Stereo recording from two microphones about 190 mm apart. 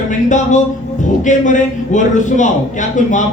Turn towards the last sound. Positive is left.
turn(degrees=40)  # may be behind; listen again after turning